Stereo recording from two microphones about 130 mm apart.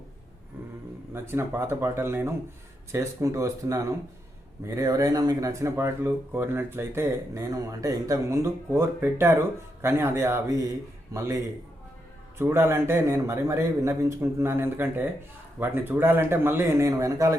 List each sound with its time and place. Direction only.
1.1 s speech: 20° right (ahead or behind)
12.4 s speech: 20° right (ahead or behind)